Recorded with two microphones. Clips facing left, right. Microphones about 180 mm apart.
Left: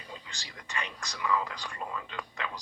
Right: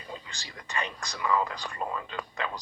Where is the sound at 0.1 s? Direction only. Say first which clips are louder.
Right 5 dB; 35° right (ahead or behind).